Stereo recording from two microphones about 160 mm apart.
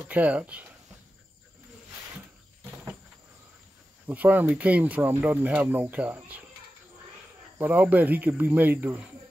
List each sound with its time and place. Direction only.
0.1 s speech: 10° right (ahead or behind)
4.1 s speech: 10° right (ahead or behind)
7.5 s speech: 10° right (ahead or behind)